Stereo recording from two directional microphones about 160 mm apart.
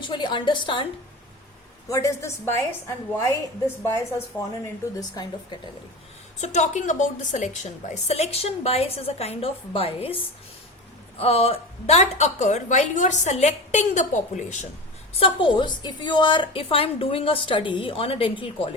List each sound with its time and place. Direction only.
0.0 s a woman's voice: 30° left (ahead or behind)
1.9 s a woman's voice: 20° left (ahead or behind)
6.4 s a woman's voice: 45° left (ahead or behind)
15.1 s a woman's voice: 35° left (ahead or behind)